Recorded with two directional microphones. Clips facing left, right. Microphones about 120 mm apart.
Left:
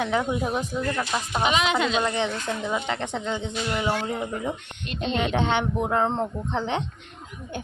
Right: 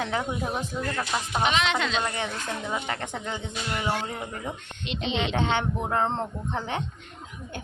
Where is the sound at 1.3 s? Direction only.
5° left (ahead or behind).